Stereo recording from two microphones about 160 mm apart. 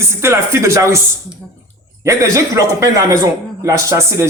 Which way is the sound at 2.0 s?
20° right (ahead or behind).